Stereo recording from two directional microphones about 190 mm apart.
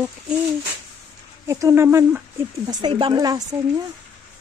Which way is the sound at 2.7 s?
25° right (ahead or behind).